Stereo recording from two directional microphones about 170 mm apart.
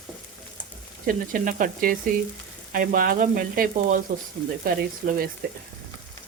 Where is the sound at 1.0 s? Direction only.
55° right (ahead or behind).